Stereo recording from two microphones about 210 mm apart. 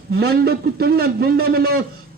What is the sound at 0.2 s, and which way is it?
A man's voice, 50° right (ahead or behind).